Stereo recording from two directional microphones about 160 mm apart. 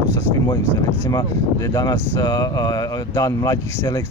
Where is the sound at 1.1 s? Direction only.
25° left (ahead or behind).